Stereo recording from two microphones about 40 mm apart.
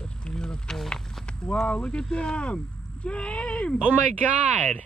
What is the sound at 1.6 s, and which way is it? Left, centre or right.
Speech, left.